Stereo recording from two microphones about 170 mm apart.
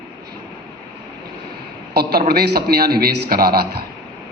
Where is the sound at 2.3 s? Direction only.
65° right (ahead or behind).